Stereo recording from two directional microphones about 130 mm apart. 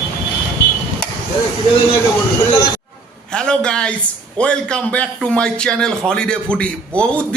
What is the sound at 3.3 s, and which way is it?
A man's voice, 5° left (ahead or behind).